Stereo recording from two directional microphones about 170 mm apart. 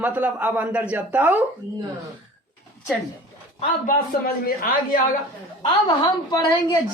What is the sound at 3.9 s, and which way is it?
A man's voice, 60° left (ahead or behind).